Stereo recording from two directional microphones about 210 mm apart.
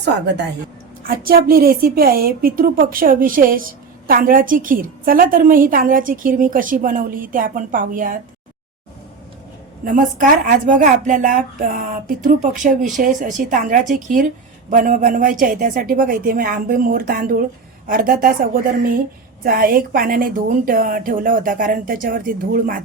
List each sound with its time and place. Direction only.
1.0 s a woman's voice: 45° right (ahead or behind)
9.8 s a woman's voice: 40° right (ahead or behind)
19.5 s a woman's voice: 45° right (ahead or behind)